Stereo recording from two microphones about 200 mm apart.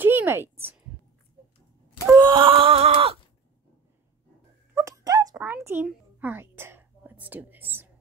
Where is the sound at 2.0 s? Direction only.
20° right (ahead or behind).